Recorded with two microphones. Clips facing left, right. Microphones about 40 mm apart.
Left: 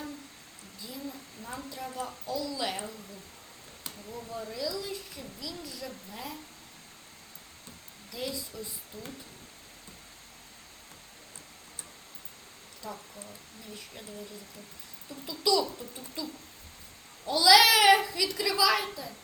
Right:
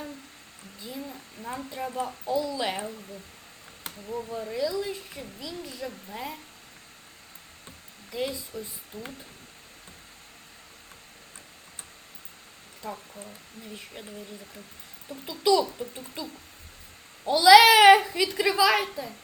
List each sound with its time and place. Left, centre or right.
0.8 s a child's voice: right
8.1 s a child's voice: right
12.8 s speech: right
15.1 s a child's voice: right